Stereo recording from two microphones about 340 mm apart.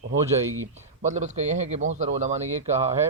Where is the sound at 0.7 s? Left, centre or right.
Centre.